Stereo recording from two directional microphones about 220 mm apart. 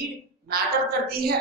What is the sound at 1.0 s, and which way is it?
Speech, 45° right (ahead or behind).